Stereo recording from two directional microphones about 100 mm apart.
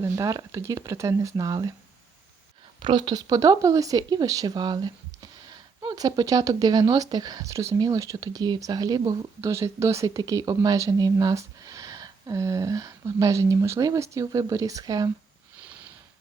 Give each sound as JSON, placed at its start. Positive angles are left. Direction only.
{"t": 0.0, "sound": "speech", "side_deg": -35}
{"t": 2.8, "sound": "speech", "side_deg": -50}